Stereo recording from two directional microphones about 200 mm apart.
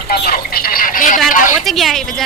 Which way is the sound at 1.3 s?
45° left (ahead or behind).